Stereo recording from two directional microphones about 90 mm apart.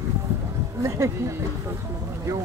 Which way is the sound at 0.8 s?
35° right (ahead or behind).